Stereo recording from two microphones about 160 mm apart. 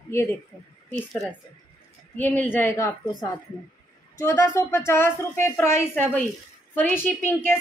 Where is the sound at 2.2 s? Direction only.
10° left (ahead or behind).